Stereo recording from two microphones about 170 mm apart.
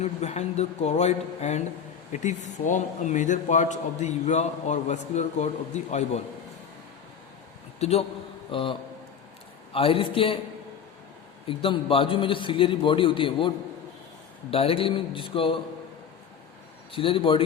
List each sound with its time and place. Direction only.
0.0 s a man's voice: 40° left (ahead or behind)
7.8 s a man's voice: 40° left (ahead or behind)
8.4 s music: 30° left (ahead or behind)
9.7 s a man's voice: 30° left (ahead or behind)
11.4 s a man's voice: 30° left (ahead or behind)
14.5 s a man's voice: 35° left (ahead or behind)
16.9 s a man's voice: 30° left (ahead or behind)